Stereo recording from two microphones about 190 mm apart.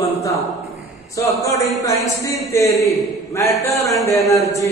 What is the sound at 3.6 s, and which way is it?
Speech, 35° left (ahead or behind).